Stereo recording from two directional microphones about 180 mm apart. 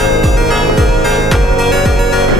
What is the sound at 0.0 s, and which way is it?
Music, centre (ahead or behind).